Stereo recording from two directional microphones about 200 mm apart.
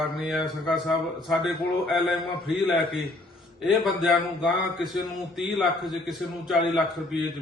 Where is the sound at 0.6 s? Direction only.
Centre (ahead or behind).